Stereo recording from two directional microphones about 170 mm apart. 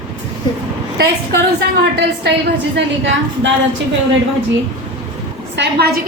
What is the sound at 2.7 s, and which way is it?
Speech, 90° right.